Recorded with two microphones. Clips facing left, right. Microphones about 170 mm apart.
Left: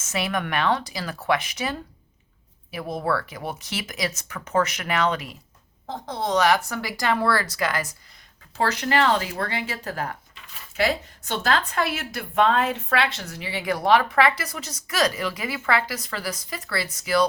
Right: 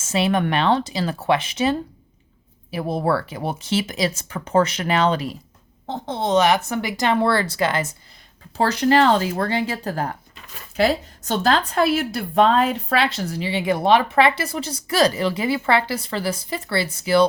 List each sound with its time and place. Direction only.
0.0 s speech: 30° right (ahead or behind)